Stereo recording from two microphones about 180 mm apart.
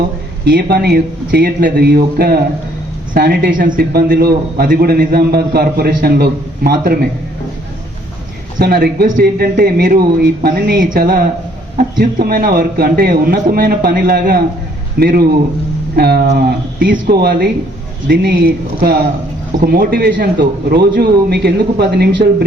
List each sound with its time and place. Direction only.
0.4 s speech: 60° right (ahead or behind)
8.5 s speech: 60° right (ahead or behind)
19.5 s speech: 55° right (ahead or behind)